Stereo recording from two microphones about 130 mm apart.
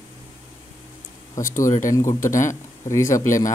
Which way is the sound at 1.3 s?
90° left.